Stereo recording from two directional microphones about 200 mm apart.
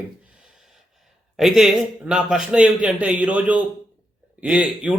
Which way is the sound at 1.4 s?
Centre (ahead or behind).